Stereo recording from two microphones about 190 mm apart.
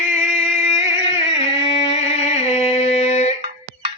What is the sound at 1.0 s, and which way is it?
Music, 30° left (ahead or behind).